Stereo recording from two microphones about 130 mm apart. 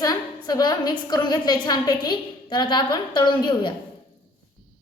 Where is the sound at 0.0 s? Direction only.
30° left (ahead or behind).